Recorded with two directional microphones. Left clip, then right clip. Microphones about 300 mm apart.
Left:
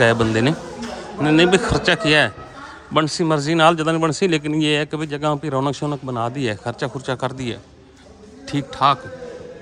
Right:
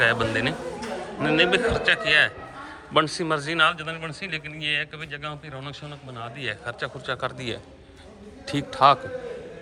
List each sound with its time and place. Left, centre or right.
0.0 s a man's voice: centre